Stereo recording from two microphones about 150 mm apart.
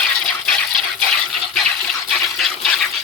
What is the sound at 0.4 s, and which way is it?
Water, 5° left (ahead or behind).